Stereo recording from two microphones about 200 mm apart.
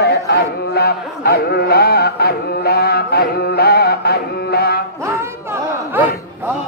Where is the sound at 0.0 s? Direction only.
55° left (ahead or behind).